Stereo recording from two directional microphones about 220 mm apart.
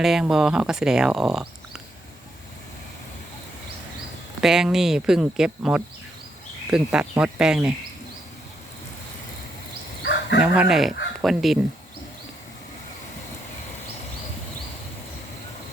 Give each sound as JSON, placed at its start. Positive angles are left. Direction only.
{"t": 0.0, "sound": "speech", "side_deg": 0}
{"t": 4.4, "sound": "speech", "side_deg": -5}
{"t": 10.0, "sound": "a sound", "side_deg": 50}
{"t": 10.4, "sound": "speech", "side_deg": -5}